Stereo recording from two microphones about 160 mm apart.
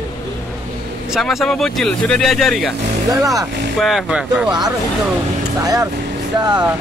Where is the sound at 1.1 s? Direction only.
Centre (ahead or behind).